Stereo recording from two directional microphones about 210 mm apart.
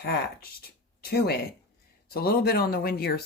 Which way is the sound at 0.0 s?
45° left (ahead or behind).